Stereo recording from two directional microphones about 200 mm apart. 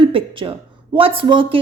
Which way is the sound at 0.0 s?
25° right (ahead or behind).